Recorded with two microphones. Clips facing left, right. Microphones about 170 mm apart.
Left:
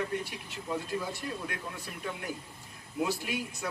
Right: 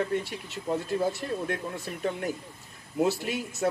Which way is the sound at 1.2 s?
45° right (ahead or behind).